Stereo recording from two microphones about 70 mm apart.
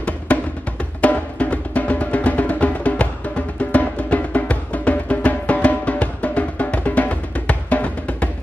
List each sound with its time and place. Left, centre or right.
0.3 s music: centre